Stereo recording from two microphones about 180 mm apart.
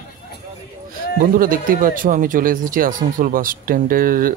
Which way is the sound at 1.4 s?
50° right (ahead or behind).